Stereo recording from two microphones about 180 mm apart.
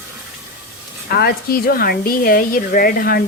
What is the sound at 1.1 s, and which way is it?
Speech, 55° left (ahead or behind).